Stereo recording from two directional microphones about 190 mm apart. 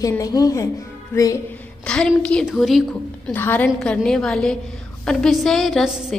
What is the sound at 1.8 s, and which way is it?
A woman's voice, 5° left (ahead or behind).